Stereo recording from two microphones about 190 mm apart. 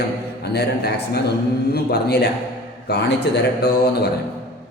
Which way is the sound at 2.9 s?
60° left (ahead or behind).